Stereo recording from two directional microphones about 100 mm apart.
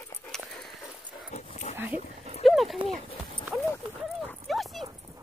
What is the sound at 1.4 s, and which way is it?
Dog, 90° left.